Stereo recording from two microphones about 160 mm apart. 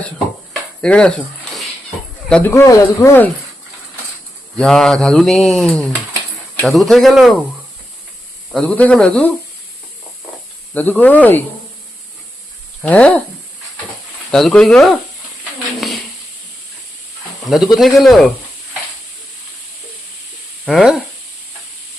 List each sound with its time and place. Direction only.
0.8 s speech: 5° left (ahead or behind)
2.3 s speech: 15° left (ahead or behind)
4.5 s speech: 5° left (ahead or behind)
8.5 s speech: 10° left (ahead or behind)
10.8 s speech: 10° left (ahead or behind)
12.8 s speech: 10° left (ahead or behind)
14.3 s speech: centre (ahead or behind)
17.7 s speech: centre (ahead or behind)
20.7 s speech: centre (ahead or behind)